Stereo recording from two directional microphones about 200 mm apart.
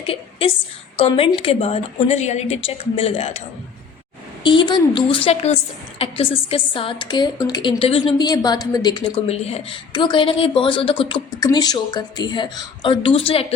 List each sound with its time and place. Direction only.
0.1 s a woman's voice: 30° left (ahead or behind)
4.4 s a woman's voice: 25° left (ahead or behind)